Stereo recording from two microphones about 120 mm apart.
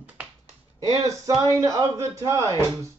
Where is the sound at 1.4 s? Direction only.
30° right (ahead or behind).